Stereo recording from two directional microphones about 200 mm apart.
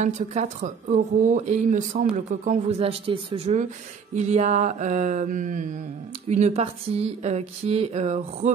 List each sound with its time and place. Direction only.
0.0 s speech: 35° right (ahead or behind)